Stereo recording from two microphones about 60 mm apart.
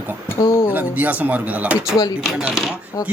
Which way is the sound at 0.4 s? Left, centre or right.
Left.